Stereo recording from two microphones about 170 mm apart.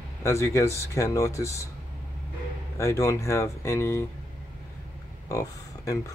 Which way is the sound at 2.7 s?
15° left (ahead or behind).